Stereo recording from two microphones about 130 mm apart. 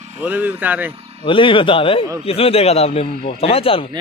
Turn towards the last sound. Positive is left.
turn(degrees=45)  # may be behind; listen again after turning